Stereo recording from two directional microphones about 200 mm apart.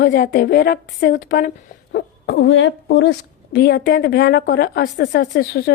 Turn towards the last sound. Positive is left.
turn(degrees=50)  # may be behind; listen again after turning